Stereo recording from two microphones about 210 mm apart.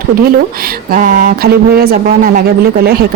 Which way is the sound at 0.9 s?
40° right (ahead or behind).